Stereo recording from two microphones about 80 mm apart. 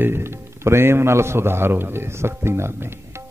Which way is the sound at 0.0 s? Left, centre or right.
Right.